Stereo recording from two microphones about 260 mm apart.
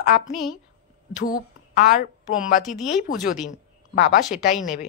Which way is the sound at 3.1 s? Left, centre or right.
Left.